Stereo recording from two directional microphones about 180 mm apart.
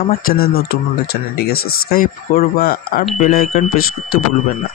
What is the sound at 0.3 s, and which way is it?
Speech, 55° left (ahead or behind).